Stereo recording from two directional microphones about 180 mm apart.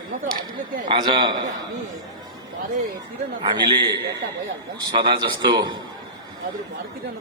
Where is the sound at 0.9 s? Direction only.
25° right (ahead or behind).